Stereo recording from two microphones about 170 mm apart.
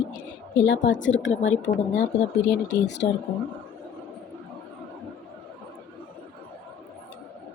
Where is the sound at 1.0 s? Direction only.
90° left.